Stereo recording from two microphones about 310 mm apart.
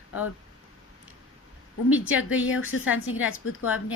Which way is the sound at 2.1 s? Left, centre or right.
Left.